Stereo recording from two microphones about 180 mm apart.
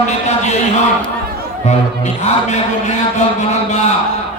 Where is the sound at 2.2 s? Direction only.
40° left (ahead or behind).